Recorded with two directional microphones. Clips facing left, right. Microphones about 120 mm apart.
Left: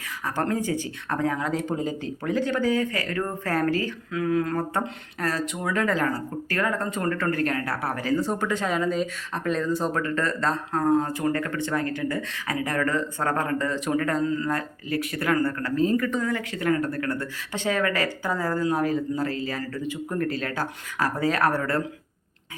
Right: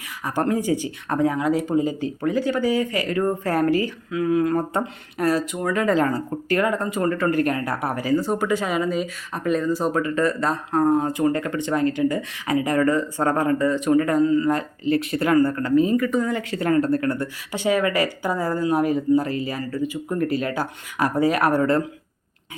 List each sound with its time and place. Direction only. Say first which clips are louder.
0.3 s speech: right 4 dB; 15° right (ahead or behind)
14.5 s speech: right 6 dB; 25° right (ahead or behind); by 16.2 s 5° right (ahead or behind)
16.2 s speech: right 2 dB; 25° right (ahead or behind)
17.5 s speech: right 4 dB; 10° right (ahead or behind)